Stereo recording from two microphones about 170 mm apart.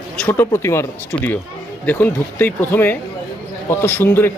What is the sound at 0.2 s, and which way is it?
Speech, 10° left (ahead or behind).